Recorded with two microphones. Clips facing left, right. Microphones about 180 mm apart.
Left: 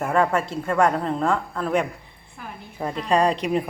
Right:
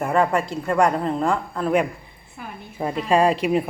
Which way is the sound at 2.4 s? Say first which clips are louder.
Right 2 dB; 5° right (ahead or behind).